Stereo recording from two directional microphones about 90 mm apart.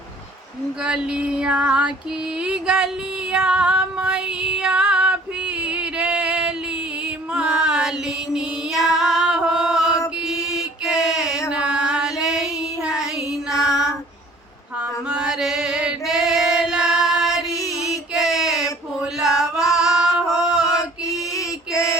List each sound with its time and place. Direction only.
0.9 s female singing: 10° right (ahead or behind)
5.6 s music: 10° right (ahead or behind)
7.3 s female singing: 10° right (ahead or behind)
11.3 s a sound: 40° left (ahead or behind)
11.5 s music: 10° right (ahead or behind)
12.8 s child singing: 10° right (ahead or behind)
15.1 s female singing: 10° right (ahead or behind)
17.5 s mantra: 35° left (ahead or behind)
18.1 s a sound: 5° right (ahead or behind)
19.7 s female singing: 5° right (ahead or behind)